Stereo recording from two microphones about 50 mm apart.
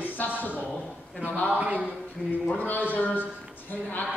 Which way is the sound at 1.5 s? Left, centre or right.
Right.